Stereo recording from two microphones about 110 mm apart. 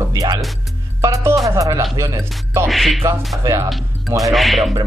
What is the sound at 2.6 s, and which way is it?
Speech, centre (ahead or behind).